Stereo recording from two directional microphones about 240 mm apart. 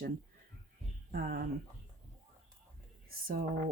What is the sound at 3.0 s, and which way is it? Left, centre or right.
Speech, right.